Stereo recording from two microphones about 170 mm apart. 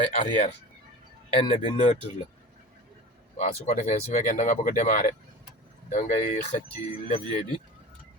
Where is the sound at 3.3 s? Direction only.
40° left (ahead or behind).